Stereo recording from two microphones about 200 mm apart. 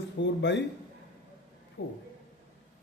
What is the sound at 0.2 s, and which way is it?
Speech, 65° left (ahead or behind).